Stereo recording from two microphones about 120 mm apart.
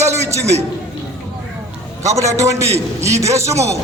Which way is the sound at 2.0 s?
25° right (ahead or behind).